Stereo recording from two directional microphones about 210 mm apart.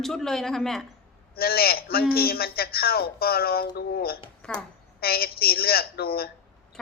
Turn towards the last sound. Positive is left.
turn(degrees=45)  # may be behind; listen again after turning